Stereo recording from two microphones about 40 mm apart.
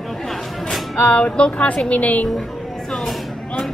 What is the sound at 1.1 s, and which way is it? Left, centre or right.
A woman's voice, left.